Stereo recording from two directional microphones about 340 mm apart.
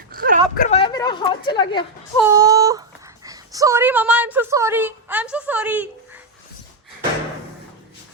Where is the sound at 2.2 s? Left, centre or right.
Centre.